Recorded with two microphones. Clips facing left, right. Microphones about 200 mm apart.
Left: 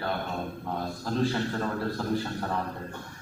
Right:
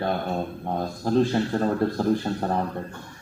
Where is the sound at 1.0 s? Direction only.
35° right (ahead or behind).